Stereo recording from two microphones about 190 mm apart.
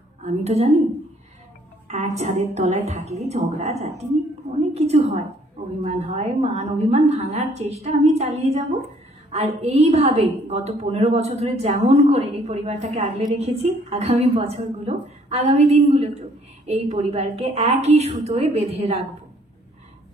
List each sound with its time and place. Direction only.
0.2 s a woman's voice: 35° right (ahead or behind)
1.9 s a woman's voice: 35° right (ahead or behind)